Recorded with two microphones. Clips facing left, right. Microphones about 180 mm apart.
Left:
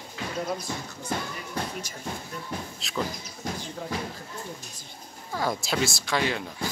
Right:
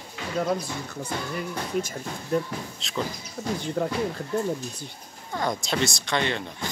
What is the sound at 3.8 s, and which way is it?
Speech, 65° right (ahead or behind).